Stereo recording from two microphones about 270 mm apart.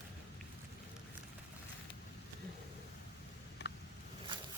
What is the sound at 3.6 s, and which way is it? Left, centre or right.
Vehicle, left.